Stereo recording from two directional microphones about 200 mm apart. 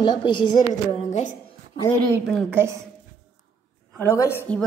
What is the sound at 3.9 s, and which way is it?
Speech, 10° left (ahead or behind).